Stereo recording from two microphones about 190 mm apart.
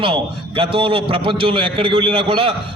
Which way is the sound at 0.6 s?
30° right (ahead or behind).